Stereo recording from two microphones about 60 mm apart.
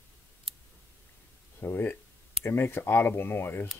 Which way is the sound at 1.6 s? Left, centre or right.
Left.